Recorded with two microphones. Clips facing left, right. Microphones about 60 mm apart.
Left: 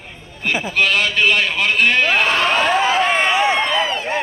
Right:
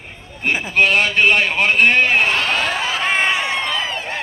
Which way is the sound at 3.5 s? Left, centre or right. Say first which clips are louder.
Left 4 dB; centre.